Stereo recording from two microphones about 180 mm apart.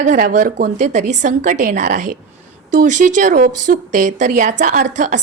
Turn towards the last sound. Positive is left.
turn(degrees=-45)  # may be behind; listen again after turning